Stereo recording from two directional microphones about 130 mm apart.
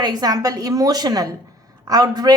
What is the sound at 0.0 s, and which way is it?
A woman's voice, 30° right (ahead or behind).